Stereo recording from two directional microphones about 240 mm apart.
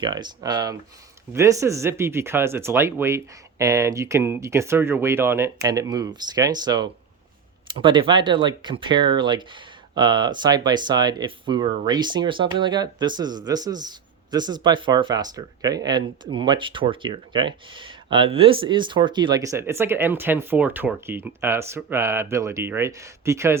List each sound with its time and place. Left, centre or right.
0.0 s speech: centre